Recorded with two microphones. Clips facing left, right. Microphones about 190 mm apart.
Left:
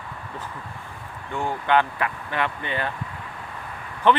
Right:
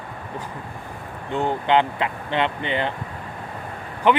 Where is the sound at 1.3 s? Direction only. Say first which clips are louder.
Right 3 dB; 20° right (ahead or behind).